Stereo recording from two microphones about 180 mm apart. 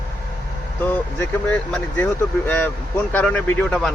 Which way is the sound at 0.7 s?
10° left (ahead or behind).